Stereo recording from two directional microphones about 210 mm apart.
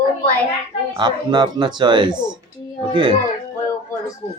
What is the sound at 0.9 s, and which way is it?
Speech, 20° right (ahead or behind).